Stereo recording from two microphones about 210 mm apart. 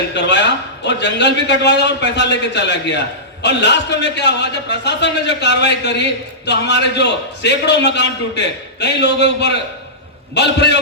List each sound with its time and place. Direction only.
0.1 s a man's voice: 55° left (ahead or behind)